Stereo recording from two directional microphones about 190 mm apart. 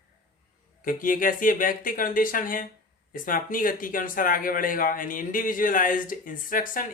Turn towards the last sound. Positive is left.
turn(degrees=45)  # may be behind; listen again after turning